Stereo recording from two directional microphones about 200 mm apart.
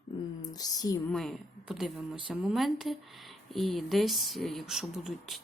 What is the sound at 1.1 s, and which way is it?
Speech, centre (ahead or behind).